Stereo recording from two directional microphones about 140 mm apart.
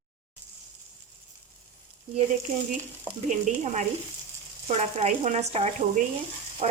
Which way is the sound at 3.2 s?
60° right (ahead or behind).